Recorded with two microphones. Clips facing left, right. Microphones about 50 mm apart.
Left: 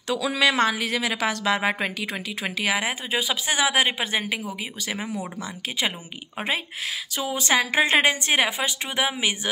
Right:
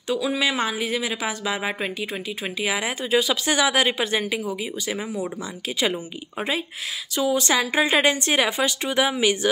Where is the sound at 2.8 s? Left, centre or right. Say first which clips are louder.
Right 4 dB; left.